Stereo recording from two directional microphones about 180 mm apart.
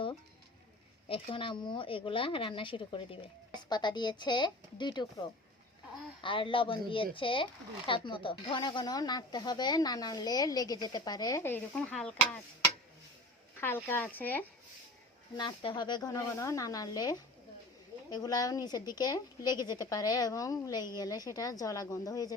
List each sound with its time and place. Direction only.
1.0 s speech: 30° left (ahead or behind)
6.2 s speech: 30° left (ahead or behind); by 12.4 s 5° left (ahead or behind)
13.6 s speech: 10° left (ahead or behind)
15.4 s speech: 25° left (ahead or behind)